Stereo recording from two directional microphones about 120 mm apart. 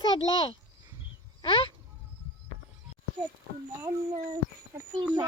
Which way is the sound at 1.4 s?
50° left (ahead or behind).